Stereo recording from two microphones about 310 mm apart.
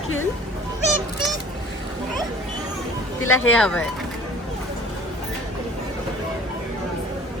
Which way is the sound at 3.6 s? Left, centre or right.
Centre.